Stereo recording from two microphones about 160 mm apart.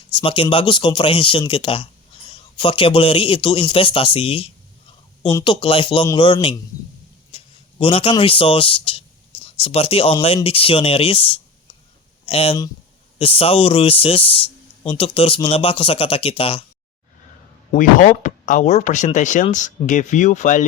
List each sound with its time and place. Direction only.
0.1 s speech: 30° left (ahead or behind)
7.3 s a sound: 35° left (ahead or behind)
8.2 s speech: 35° left (ahead or behind)
17.7 s speech: 55° left (ahead or behind)